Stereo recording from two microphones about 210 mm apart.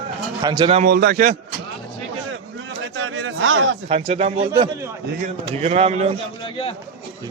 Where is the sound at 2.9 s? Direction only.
70° right (ahead or behind).